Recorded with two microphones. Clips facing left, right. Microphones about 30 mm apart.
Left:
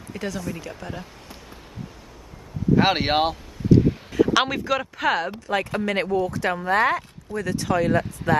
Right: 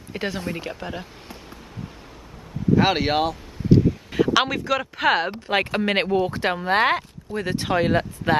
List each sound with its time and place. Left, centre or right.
0.1 s speech: right
0.7 s speech: right
2.7 s speech: centre
3.7 s a sound: right
4.3 s speech: centre
4.9 s speech: right
5.5 s speech: right